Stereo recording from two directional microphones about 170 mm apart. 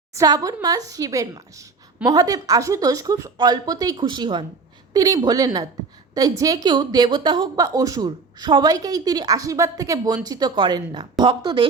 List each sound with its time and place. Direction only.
0.1 s a woman's voice: 20° right (ahead or behind)